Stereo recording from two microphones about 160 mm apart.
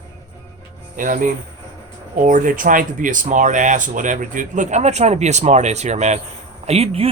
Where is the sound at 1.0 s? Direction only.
55° right (ahead or behind).